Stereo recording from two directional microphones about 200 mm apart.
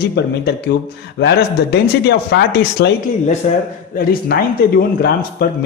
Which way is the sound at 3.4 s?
35° left (ahead or behind).